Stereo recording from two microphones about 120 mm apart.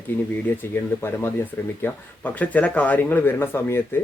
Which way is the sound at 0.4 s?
20° left (ahead or behind).